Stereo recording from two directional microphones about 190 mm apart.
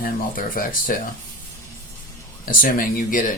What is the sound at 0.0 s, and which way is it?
Speech, 50° left (ahead or behind).